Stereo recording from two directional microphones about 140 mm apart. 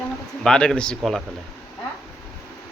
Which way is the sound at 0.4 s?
5° left (ahead or behind).